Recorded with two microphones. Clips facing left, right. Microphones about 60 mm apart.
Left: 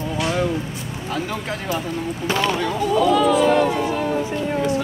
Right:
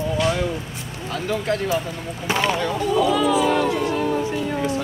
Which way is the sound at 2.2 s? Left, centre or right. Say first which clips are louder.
Even; centre.